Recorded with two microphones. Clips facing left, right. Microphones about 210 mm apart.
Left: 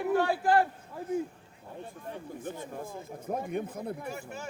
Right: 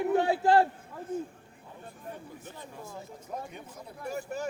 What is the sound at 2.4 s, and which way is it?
A man's voice, 50° left (ahead or behind).